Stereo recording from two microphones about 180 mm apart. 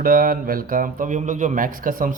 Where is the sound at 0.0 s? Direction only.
50° right (ahead or behind).